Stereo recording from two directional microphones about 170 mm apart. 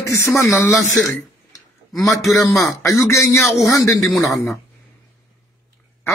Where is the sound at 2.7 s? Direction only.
15° left (ahead or behind).